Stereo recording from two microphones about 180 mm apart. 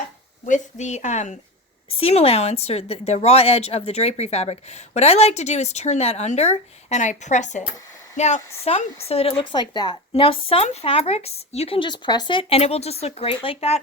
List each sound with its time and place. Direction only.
0.4 s a woman's voice: 40° left (ahead or behind)